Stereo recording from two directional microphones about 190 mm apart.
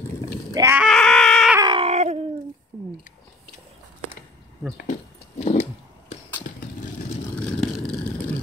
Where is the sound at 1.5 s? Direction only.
25° right (ahead or behind).